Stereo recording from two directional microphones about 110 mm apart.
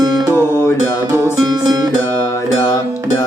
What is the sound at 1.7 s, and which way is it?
Music, 35° right (ahead or behind).